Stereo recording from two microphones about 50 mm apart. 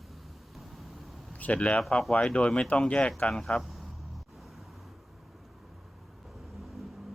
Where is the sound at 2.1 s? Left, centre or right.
Left.